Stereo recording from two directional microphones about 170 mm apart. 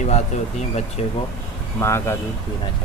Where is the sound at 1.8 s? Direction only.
15° left (ahead or behind).